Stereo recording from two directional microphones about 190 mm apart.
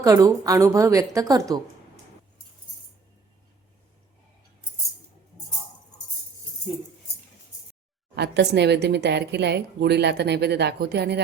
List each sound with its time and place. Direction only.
0.0 s a woman's voice: 20° right (ahead or behind)
8.1 s a woman's voice: 60° right (ahead or behind)